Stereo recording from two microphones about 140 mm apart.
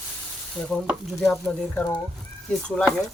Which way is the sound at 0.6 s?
5° left (ahead or behind).